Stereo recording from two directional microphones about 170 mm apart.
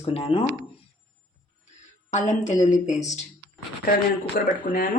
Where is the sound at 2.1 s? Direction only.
45° left (ahead or behind).